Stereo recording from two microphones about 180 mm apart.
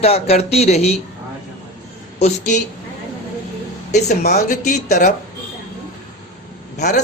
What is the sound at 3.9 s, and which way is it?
Speech, 40° left (ahead or behind).